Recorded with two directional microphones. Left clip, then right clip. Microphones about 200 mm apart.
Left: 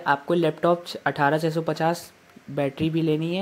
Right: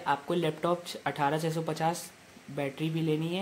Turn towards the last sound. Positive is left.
turn(degrees=30)  # may be behind; listen again after turning